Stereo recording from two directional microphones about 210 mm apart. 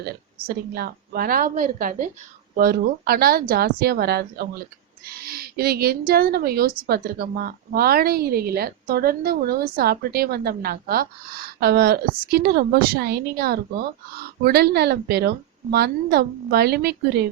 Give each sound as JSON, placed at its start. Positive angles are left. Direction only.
{"t": 0.0, "sound": "a woman's voice", "side_deg": -50}